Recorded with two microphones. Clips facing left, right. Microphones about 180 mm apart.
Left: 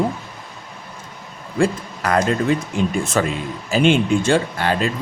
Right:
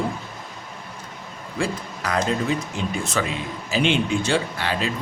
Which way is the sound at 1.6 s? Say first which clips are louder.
Left 7 dB; 55° left (ahead or behind).